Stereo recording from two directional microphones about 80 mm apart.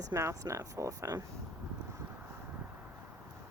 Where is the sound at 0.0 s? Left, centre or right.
Right.